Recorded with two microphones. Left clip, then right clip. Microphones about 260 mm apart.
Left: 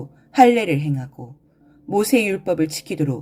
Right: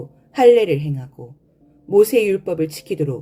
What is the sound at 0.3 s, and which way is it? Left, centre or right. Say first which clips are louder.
Speech: right 2 dB; left.